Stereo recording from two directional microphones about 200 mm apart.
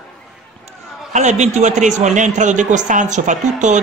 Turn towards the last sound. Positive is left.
turn(degrees=-35)  # may be behind; listen again after turning